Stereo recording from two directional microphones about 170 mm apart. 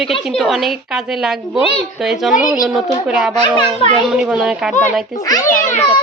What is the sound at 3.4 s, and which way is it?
Speech, 30° left (ahead or behind).